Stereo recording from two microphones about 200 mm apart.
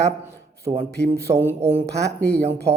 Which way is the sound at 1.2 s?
10° right (ahead or behind).